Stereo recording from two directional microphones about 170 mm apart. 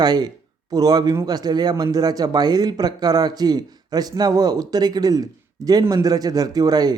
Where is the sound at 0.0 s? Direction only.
25° right (ahead or behind).